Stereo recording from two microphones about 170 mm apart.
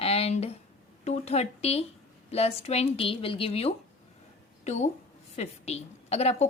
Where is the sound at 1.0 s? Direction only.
40° left (ahead or behind).